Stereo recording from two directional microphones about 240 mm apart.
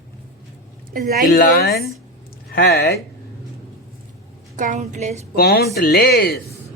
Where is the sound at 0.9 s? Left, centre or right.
Right.